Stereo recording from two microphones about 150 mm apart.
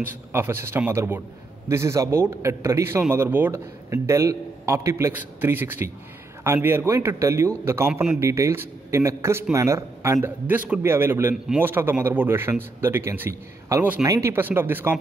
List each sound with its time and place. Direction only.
0.0 s a man's voice: 15° right (ahead or behind)